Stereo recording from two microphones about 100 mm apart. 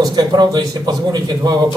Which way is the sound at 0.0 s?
40° right (ahead or behind).